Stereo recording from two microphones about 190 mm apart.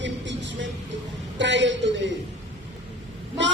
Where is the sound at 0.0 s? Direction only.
70° right (ahead or behind).